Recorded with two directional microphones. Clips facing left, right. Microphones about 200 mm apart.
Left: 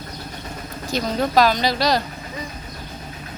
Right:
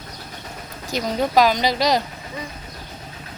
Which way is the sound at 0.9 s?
15° right (ahead or behind).